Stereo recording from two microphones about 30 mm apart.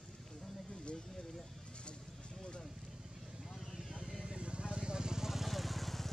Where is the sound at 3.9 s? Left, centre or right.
Right.